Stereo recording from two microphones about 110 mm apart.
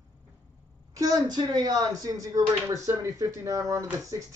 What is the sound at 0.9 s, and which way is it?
Speech, 35° right (ahead or behind).